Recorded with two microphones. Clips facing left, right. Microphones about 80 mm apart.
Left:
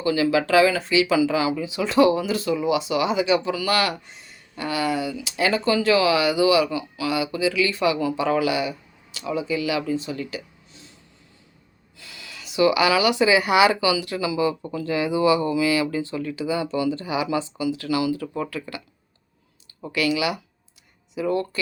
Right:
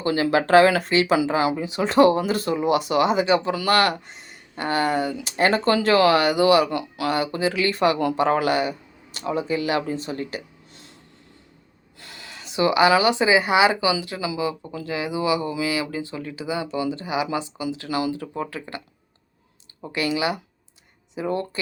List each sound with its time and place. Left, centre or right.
0.0 s speech: right
10.7 s a sound: right
11.9 s speech: right
18.2 s speech: centre
19.9 s speech: right